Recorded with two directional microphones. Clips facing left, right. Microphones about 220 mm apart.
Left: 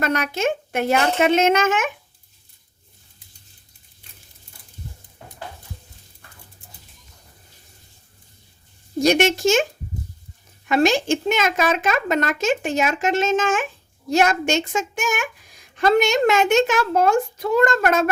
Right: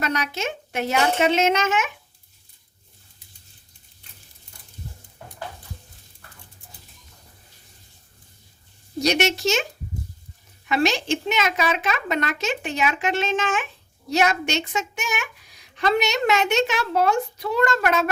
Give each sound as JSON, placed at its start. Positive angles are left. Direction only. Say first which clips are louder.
{"t": 0.0, "sound": "a woman's voice", "louder": "left 5 dB", "side_deg": 50}
{"t": 9.0, "sound": "a woman's voice", "louder": "left 4 dB", "side_deg": 50}
{"t": 10.7, "sound": "a woman's voice", "louder": "left 4 dB", "side_deg": 50}